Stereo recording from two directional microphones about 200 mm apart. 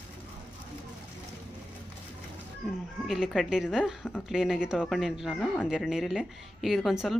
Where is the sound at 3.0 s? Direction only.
Centre (ahead or behind).